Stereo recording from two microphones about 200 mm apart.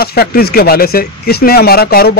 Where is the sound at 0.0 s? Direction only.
50° left (ahead or behind).